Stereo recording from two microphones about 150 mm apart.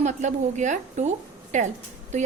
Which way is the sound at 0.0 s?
50° right (ahead or behind).